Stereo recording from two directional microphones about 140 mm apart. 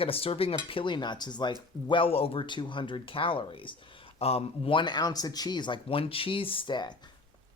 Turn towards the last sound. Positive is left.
turn(degrees=35)  # may be behind; listen again after turning